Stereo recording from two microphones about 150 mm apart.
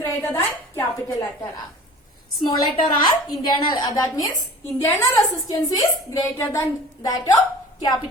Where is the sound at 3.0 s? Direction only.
30° left (ahead or behind).